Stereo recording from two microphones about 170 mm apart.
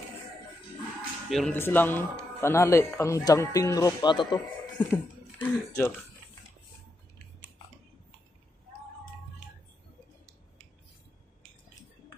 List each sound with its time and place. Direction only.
1.3 s speech: centre (ahead or behind); by 4.4 s 25° left (ahead or behind)
4.7 s speech: 10° left (ahead or behind)